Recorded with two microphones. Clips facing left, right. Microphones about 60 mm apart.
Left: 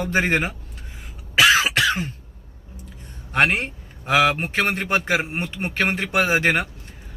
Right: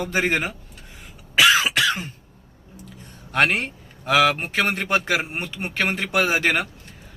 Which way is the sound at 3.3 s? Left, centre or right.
Left.